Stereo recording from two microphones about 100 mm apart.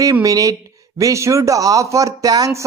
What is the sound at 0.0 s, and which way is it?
A man's voice, 35° right (ahead or behind).